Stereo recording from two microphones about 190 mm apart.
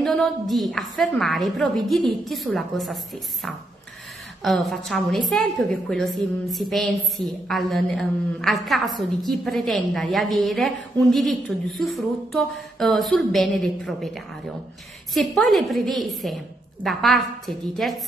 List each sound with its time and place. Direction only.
0.0 s a woman's voice: centre (ahead or behind)
4.4 s a woman's voice: centre (ahead or behind)